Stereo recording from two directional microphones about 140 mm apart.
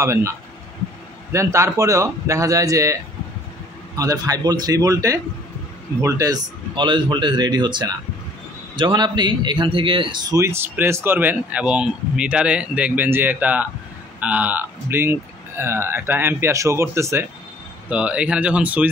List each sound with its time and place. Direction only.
0.0 s a man's voice: 20° right (ahead or behind)